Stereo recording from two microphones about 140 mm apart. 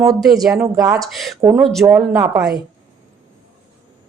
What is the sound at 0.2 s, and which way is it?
A woman's voice, centre (ahead or behind).